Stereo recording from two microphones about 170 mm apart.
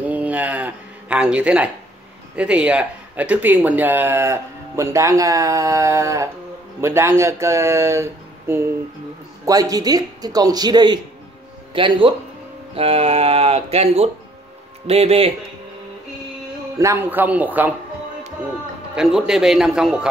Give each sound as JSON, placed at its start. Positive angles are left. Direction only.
{"t": 0.0, "sound": "speech", "side_deg": -10}
{"t": 16.7, "sound": "speech", "side_deg": -15}
{"t": 18.9, "sound": "a man's voice", "side_deg": -5}